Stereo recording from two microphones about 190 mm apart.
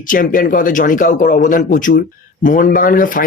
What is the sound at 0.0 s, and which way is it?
Speech, 45° left (ahead or behind).